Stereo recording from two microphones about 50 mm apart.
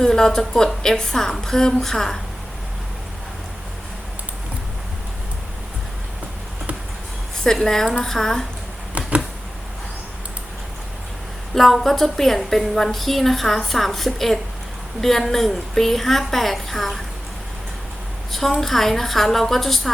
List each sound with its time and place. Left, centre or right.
0.0 s a woman's voice: centre
7.3 s a woman's voice: centre
9.0 s a sound: right
11.5 s a woman's voice: centre
18.3 s a woman's voice: centre